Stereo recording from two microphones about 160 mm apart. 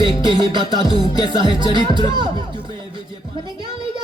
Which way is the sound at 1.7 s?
30° right (ahead or behind).